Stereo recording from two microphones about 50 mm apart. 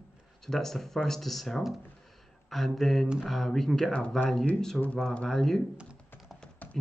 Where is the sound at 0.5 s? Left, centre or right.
Centre.